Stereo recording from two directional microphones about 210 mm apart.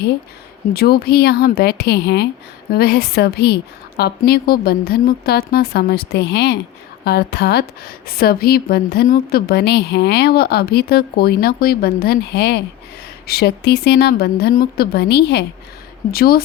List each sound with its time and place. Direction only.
0.7 s a woman's voice: 50° left (ahead or behind)